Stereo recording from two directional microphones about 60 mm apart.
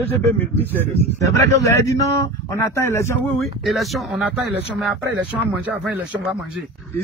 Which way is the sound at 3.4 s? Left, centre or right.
Centre.